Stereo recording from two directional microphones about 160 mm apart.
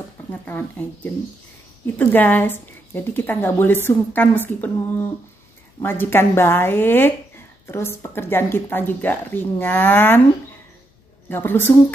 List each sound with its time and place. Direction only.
0.3 s speech: 10° left (ahead or behind)
2.0 s speech: 10° left (ahead or behind)
11.2 s speech: 10° left (ahead or behind)